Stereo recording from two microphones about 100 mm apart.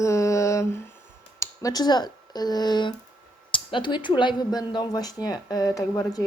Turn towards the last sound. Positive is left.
turn(degrees=35)  # may be behind; listen again after turning